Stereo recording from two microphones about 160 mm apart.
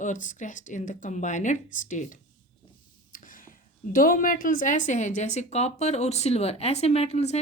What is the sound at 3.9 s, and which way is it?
A woman's voice, 60° left (ahead or behind).